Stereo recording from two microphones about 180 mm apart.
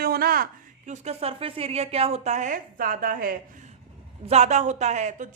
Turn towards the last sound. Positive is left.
turn(degrees=-40)  # may be behind; listen again after turning